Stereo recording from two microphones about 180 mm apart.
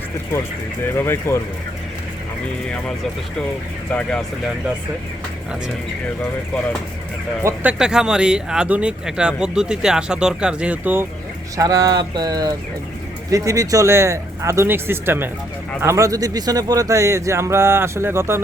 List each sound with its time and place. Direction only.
0.9 s speech: 15° left (ahead or behind)
3.9 s speech: 5° left (ahead or behind)
7.4 s speech: 10° right (ahead or behind)
11.5 s a man's voice: 20° right (ahead or behind)